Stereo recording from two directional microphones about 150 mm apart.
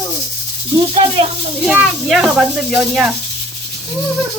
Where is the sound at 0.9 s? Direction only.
35° right (ahead or behind).